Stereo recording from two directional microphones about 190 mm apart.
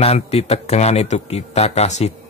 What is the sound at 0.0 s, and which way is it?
Speech, 30° left (ahead or behind).